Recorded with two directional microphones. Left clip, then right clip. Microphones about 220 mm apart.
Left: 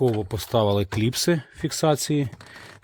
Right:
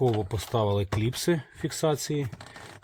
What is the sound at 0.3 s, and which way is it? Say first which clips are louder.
Speech: left 5 dB; 30° left (ahead or behind).